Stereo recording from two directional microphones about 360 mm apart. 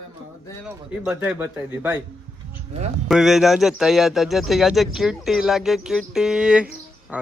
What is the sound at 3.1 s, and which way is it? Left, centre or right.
Speech, centre.